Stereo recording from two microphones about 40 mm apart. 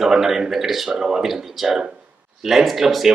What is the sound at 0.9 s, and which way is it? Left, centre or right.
Speech, centre.